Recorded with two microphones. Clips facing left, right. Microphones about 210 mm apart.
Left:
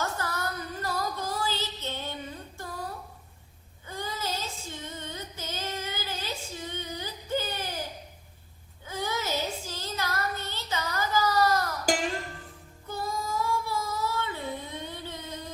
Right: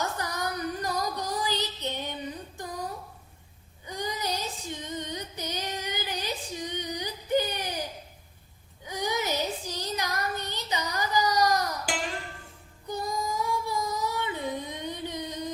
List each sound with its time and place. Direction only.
0.0 s child singing: 15° right (ahead or behind)
2.6 s a sound: 15° right (ahead or behind)
3.8 s child singing: 15° right (ahead or behind)
8.9 s child singing: 15° right (ahead or behind)
12.9 s child singing: 15° right (ahead or behind)